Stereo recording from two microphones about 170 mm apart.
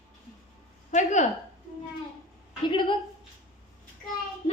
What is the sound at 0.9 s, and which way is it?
Speech, 45° left (ahead or behind).